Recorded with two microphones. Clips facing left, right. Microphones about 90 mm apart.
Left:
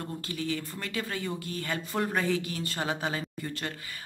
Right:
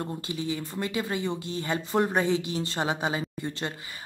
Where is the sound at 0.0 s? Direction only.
25° right (ahead or behind).